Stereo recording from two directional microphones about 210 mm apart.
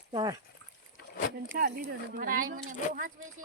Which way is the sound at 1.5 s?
50° right (ahead or behind).